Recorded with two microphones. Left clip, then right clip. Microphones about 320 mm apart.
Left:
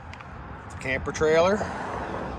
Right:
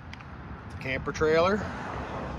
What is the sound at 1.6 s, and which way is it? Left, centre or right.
Vehicle, left.